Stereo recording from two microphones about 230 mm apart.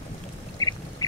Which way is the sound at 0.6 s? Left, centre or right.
Centre.